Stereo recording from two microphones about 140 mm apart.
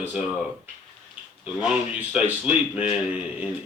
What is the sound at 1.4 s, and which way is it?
Speech, 5° right (ahead or behind).